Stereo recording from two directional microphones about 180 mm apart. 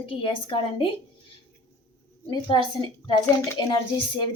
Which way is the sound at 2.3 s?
25° left (ahead or behind).